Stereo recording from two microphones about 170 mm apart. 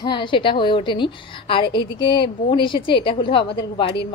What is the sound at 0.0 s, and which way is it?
A woman's voice, 25° left (ahead or behind).